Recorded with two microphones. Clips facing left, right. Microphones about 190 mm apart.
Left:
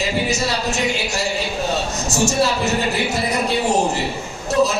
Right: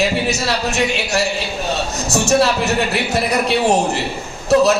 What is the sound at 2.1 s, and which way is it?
Speech, 65° right (ahead or behind).